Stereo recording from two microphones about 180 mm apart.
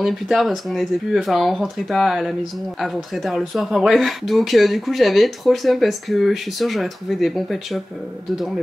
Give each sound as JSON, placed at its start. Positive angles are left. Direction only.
{"t": 0.0, "sound": "speech", "side_deg": 0}